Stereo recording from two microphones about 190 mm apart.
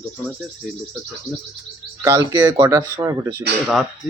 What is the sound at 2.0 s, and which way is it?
Speech, 15° right (ahead or behind).